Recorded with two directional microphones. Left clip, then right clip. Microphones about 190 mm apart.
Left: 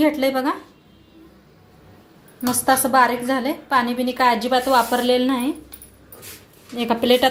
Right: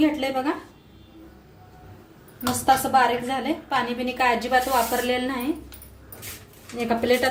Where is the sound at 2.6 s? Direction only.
35° left (ahead or behind).